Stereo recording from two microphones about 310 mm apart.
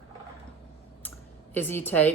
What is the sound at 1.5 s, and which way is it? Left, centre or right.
Speech, centre.